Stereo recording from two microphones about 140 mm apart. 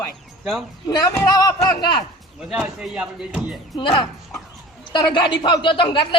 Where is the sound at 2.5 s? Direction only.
5° right (ahead or behind).